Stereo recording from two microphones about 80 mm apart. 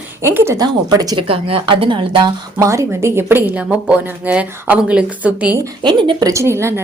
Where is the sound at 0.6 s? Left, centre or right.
Right.